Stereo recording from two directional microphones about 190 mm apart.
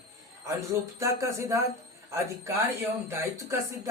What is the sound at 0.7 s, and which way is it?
Speech, 15° right (ahead or behind).